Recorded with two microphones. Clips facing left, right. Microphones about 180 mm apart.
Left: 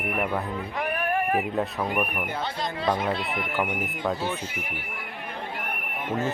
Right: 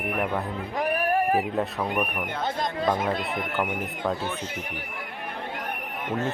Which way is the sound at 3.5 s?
5° left (ahead or behind).